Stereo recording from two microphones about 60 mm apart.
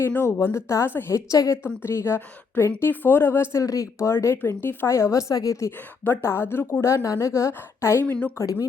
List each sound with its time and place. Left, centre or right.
0.3 s a woman's voice: left
1.1 s speech: left
1.6 s speech: left
3.6 s speech: left
4.4 s speech: left
4.9 s a woman's voice: left
5.3 s a woman's voice: left
6.1 s speech: left
6.8 s a woman's voice: left
8.0 s a woman's voice: left